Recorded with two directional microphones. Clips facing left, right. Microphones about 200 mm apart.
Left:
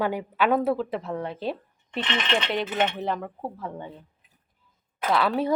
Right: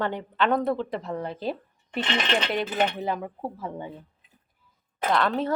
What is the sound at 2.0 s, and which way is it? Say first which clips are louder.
Speech: right 1 dB; 35° right (ahead or behind).